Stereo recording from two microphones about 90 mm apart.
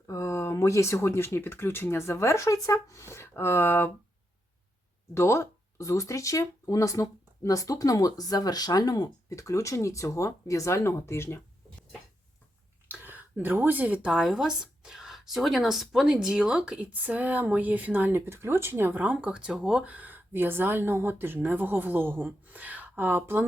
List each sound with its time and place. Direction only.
0.1 s speech: 35° left (ahead or behind)
5.1 s speech: 30° left (ahead or behind)
12.9 s speech: 20° right (ahead or behind)